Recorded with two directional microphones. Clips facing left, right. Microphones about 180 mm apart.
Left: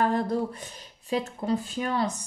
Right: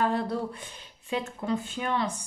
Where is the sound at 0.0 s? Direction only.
45° left (ahead or behind).